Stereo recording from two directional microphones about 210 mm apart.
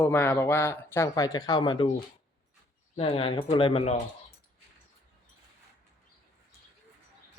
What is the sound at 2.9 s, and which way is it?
Speech, 25° left (ahead or behind).